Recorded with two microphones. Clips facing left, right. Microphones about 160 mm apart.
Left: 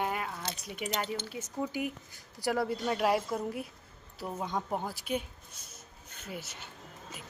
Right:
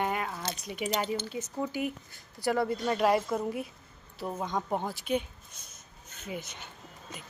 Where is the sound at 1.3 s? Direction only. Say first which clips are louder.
Right 2 dB; 15° left (ahead or behind).